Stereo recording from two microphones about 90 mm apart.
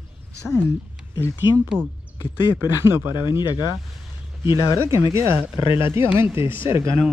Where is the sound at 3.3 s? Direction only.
60° left (ahead or behind).